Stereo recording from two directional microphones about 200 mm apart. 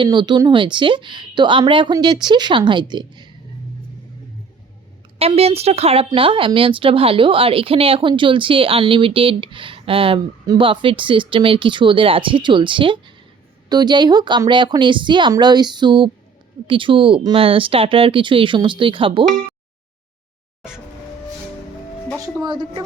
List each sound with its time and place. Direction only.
0.0 s a woman's voice: 25° right (ahead or behind)
5.2 s a woman's voice: 30° right (ahead or behind)
22.4 s a woman's voice: 20° right (ahead or behind)